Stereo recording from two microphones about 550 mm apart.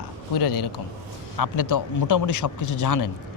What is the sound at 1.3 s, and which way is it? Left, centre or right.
A man's voice, left.